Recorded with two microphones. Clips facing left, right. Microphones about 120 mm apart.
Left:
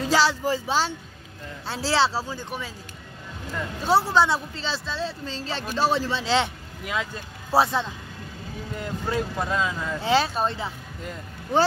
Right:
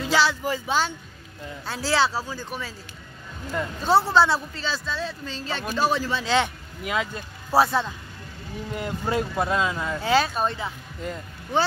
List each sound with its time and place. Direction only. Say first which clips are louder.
0.0 s speech: left 1 dB; 35° left (ahead or behind); by 2.7 s 20° left (ahead or behind)
3.8 s speech: right 1 dB; 10° left (ahead or behind)
6.8 s speech: right 2 dB; 5° right (ahead or behind)
7.5 s speech: right 1 dB; 20° left (ahead or behind)
8.7 s speech: right 2 dB; 10° right (ahead or behind)
10.0 s speech: even; 30° left (ahead or behind)